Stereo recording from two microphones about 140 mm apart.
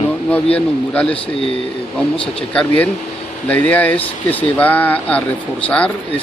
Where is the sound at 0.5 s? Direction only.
10° left (ahead or behind).